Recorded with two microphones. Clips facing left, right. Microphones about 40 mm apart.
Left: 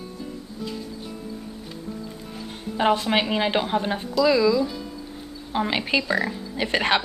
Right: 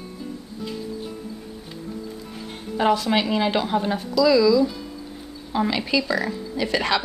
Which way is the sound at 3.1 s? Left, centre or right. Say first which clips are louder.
Right 1 dB; left.